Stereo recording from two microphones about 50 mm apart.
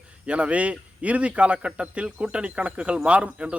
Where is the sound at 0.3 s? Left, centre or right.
Right.